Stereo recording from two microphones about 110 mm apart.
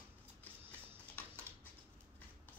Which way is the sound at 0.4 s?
15° left (ahead or behind).